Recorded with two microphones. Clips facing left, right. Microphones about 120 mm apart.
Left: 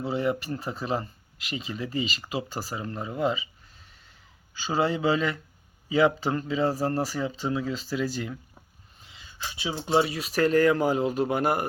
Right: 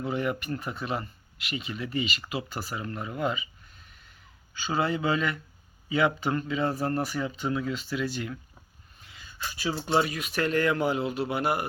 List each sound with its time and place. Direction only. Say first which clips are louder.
0.0 s speech: left 2 dB; 30° left (ahead or behind)
4.5 s speech: left 2 dB; 30° left (ahead or behind)
9.0 s speech: even; 25° left (ahead or behind); by 11.6 s 45° left (ahead or behind)